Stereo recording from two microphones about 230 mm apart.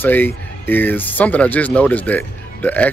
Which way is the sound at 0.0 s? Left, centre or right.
Centre.